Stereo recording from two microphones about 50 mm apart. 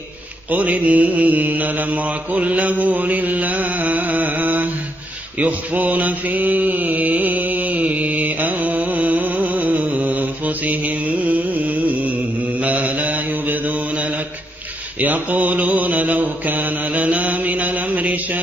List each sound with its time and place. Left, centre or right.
0.5 s mantra: right